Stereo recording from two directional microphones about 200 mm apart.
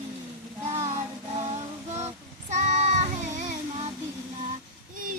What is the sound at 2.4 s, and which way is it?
Child singing, 40° right (ahead or behind).